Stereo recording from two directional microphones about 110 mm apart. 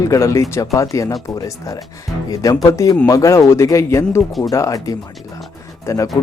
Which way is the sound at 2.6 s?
30° left (ahead or behind).